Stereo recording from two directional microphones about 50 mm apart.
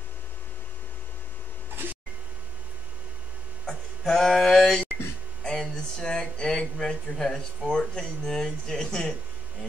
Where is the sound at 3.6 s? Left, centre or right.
Centre.